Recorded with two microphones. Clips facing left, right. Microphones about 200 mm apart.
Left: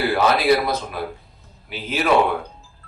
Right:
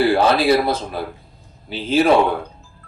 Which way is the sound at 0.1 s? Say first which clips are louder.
Right 3 dB; 30° right (ahead or behind).